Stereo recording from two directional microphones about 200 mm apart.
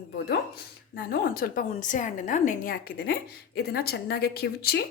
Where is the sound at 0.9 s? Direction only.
50° left (ahead or behind).